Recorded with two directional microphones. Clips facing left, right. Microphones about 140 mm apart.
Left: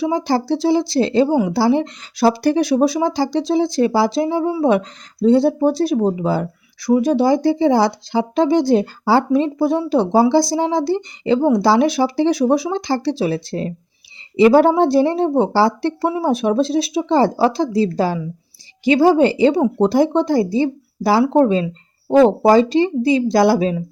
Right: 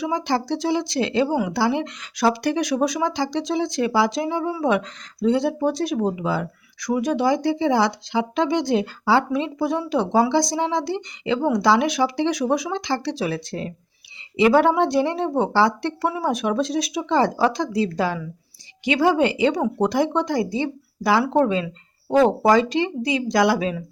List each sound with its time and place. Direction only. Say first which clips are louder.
0.0 s speech: left 5 dB; 35° left (ahead or behind)